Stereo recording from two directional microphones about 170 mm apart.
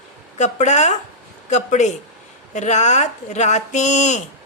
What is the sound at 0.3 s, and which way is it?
Speech, 45° left (ahead or behind).